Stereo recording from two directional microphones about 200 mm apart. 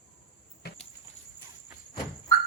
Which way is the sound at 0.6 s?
50° left (ahead or behind).